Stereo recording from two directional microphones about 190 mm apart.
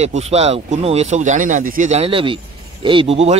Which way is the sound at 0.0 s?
35° right (ahead or behind).